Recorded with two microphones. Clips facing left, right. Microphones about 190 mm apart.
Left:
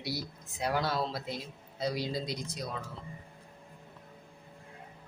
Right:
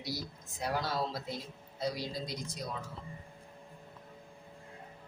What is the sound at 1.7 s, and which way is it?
Speech, 75° left (ahead or behind).